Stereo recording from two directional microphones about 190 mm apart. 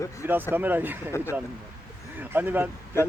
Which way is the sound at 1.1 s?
15° left (ahead or behind).